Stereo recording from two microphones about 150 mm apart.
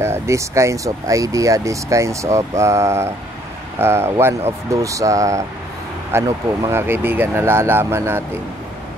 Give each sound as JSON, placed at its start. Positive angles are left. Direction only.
{"t": 0.0, "sound": "speech", "side_deg": -20}